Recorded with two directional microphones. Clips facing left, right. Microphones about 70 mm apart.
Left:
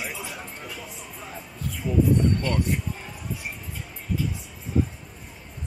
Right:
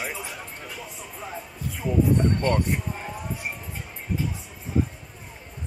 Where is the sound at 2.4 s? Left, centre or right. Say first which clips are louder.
Right 4 dB; right.